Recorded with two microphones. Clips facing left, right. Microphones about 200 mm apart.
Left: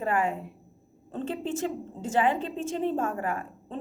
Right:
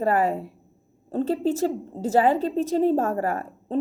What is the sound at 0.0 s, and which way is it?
A woman's voice, 35° right (ahead or behind).